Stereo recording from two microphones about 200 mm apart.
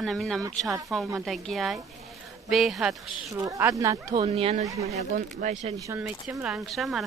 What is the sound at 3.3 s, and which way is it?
Speech, 15° right (ahead or behind).